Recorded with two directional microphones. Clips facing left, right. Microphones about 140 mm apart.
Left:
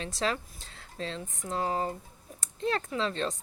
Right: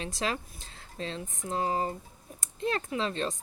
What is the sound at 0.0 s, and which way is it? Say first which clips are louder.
Speech: left 1 dB; 15° right (ahead or behind).